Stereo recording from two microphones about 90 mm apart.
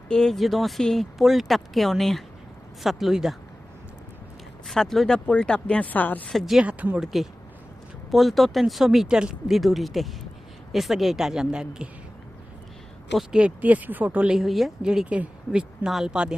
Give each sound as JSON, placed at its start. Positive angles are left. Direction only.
{"t": 0.1, "sound": "speech", "side_deg": 5}
{"t": 4.6, "sound": "speech", "side_deg": 5}
{"t": 6.2, "sound": "speech", "side_deg": 0}
{"t": 6.7, "sound": "speech", "side_deg": -15}
{"t": 7.0, "sound": "speech", "side_deg": 0}
{"t": 13.1, "sound": "speech", "side_deg": -10}
{"t": 14.3, "sound": "speech", "side_deg": 0}